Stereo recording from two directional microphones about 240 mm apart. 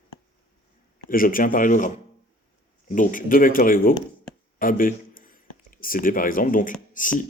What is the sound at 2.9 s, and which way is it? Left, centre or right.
Speech, left.